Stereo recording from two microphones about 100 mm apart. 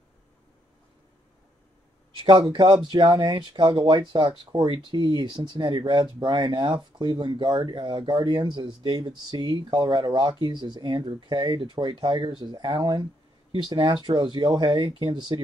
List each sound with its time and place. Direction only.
2.2 s speech: 55° right (ahead or behind)
13.5 s speech: 55° right (ahead or behind)